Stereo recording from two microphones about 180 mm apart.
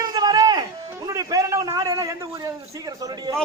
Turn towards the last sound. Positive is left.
turn(degrees=-20)  # may be behind; listen again after turning